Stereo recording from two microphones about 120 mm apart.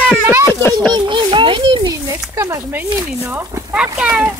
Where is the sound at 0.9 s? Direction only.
40° right (ahead or behind).